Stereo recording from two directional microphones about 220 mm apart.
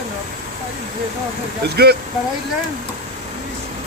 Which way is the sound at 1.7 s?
45° right (ahead or behind).